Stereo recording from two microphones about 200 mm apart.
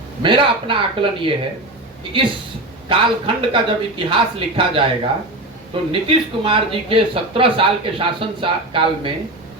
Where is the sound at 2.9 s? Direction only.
25° right (ahead or behind).